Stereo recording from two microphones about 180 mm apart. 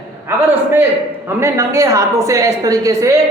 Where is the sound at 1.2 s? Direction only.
15° right (ahead or behind).